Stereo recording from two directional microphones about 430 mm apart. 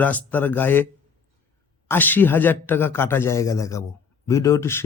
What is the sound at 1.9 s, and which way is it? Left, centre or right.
A man's voice, centre.